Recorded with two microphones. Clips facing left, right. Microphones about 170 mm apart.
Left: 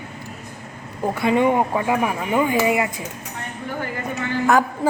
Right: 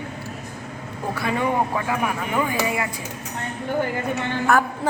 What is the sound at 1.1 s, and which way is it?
A woman's voice, 20° left (ahead or behind).